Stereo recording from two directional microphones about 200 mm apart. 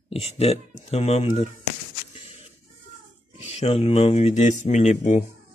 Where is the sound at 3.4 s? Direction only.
30° left (ahead or behind).